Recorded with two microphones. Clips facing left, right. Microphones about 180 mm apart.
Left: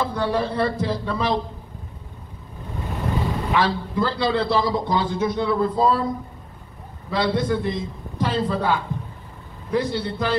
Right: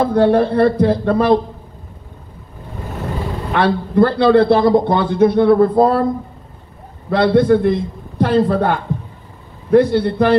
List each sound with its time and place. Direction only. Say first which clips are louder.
0.0 s a man's voice: right 10 dB; 55° right (ahead or behind)
3.5 s a man's voice: right 9 dB; 60° right (ahead or behind)
7.1 s a man's voice: right 10 dB; 60° right (ahead or behind)